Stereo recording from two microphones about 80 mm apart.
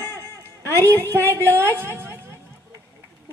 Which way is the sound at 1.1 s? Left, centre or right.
Right.